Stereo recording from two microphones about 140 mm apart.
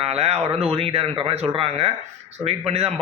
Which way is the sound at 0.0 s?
50° right (ahead or behind).